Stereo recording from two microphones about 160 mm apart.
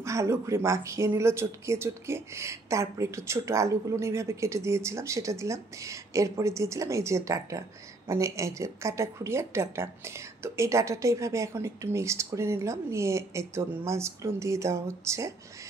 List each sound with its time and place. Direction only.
0.0 s a woman's voice: 20° right (ahead or behind)